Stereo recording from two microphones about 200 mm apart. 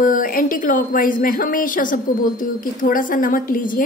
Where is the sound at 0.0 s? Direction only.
40° left (ahead or behind).